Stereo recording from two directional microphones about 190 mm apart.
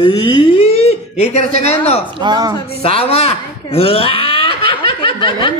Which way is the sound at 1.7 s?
35° left (ahead or behind).